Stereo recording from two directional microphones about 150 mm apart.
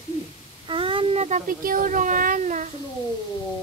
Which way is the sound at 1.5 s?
70° right (ahead or behind).